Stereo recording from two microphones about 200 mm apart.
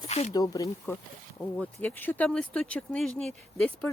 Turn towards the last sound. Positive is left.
turn(degrees=5)  # may be behind; listen again after turning